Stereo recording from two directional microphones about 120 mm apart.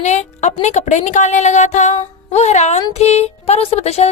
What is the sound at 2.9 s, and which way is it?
Music, 65° left (ahead or behind).